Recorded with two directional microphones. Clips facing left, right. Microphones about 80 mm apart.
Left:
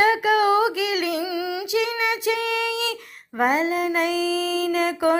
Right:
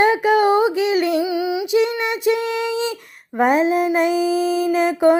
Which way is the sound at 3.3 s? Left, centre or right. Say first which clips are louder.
Right 5 dB; right.